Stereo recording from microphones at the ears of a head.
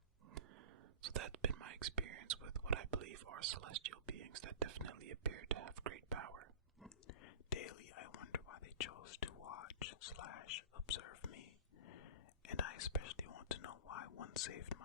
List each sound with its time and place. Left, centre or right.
1.0 s whispering: right
7.1 s whispering: left